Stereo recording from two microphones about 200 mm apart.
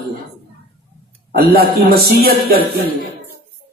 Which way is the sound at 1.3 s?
50° right (ahead or behind).